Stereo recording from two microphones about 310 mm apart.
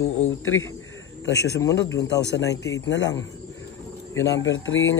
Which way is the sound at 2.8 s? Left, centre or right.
Left.